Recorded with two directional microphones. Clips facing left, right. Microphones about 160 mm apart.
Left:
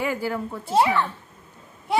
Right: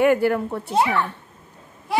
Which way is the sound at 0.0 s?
65° right (ahead or behind).